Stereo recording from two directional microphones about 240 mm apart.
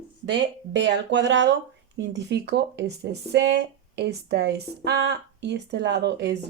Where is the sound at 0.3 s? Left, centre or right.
Right.